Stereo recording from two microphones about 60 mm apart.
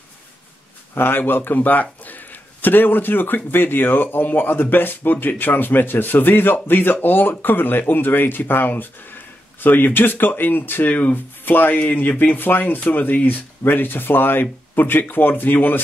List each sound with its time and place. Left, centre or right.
0.9 s speech: left